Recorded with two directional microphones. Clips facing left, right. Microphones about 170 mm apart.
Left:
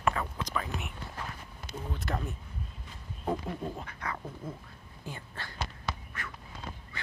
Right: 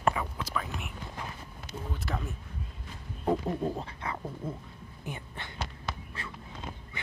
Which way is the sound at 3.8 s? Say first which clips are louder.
Right 2 dB; 25° right (ahead or behind).